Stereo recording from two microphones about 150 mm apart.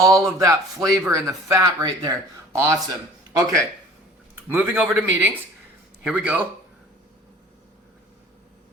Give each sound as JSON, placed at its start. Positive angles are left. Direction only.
{"t": 0.0, "sound": "a man's voice", "side_deg": -20}